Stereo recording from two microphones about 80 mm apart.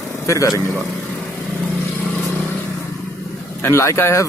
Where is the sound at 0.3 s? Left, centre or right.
Left.